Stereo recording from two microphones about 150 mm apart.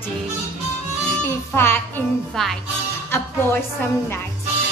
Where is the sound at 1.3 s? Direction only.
15° left (ahead or behind).